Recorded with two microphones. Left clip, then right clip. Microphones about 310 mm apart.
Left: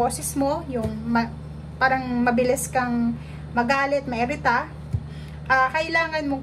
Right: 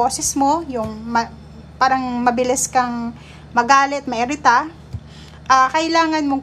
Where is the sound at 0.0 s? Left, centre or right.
Centre.